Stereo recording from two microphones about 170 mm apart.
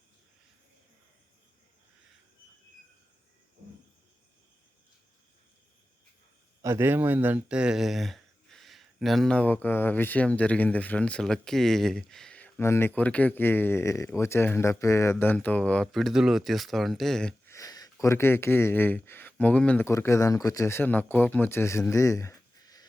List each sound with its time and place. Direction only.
6.6 s speech: 15° right (ahead or behind); by 17.5 s 5° left (ahead or behind)
17.5 s speech: 20° left (ahead or behind)